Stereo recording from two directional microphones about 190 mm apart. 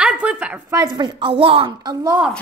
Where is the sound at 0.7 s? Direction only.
20° right (ahead or behind).